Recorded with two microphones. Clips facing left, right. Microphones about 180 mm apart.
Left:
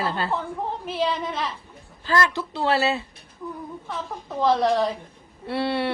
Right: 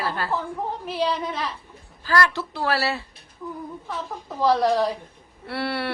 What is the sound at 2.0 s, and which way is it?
Speech, 20° left (ahead or behind).